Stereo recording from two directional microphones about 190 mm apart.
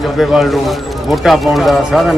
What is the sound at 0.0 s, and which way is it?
Speech, centre (ahead or behind).